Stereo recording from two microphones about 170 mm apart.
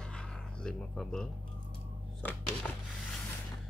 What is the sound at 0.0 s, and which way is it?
Music, 5° left (ahead or behind).